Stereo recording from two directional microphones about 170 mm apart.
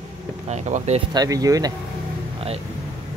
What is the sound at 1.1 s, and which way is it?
Speech, 20° right (ahead or behind).